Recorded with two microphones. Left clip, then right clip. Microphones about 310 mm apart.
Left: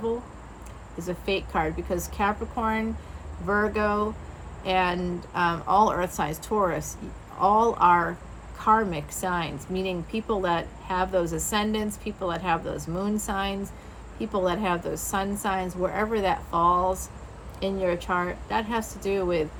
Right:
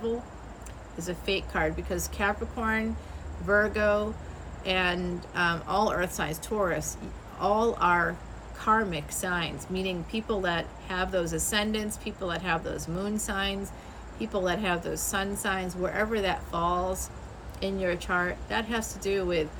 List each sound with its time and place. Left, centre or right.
1.2 s a woman's voice: centre